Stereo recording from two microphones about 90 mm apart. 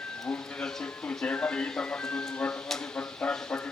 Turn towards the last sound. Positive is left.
turn(degrees=10)  # may be behind; listen again after turning